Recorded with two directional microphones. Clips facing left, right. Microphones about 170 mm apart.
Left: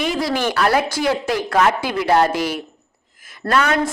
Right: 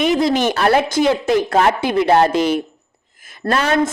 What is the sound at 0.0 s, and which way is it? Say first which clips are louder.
A woman's voice: right 5 dB; 20° right (ahead or behind).